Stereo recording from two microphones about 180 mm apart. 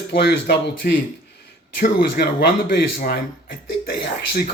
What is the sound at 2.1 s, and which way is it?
Speech, 65° left (ahead or behind).